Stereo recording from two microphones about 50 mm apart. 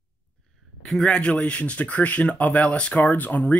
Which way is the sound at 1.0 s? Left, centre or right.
Centre.